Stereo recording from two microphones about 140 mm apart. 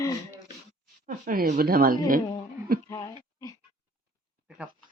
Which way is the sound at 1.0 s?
90° right.